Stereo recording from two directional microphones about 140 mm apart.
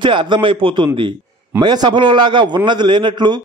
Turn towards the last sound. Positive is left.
turn(degrees=-35)  # may be behind; listen again after turning